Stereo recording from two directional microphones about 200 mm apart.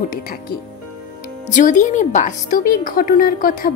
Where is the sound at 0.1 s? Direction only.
45° left (ahead or behind).